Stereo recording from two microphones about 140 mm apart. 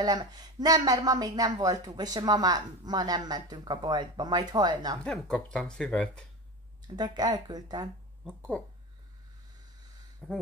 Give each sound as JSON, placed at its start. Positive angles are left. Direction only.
{"t": 0.0, "sound": "speech", "side_deg": -30}
{"t": 5.0, "sound": "speech", "side_deg": 5}
{"t": 7.0, "sound": "speech", "side_deg": -30}
{"t": 10.2, "sound": "speech", "side_deg": -5}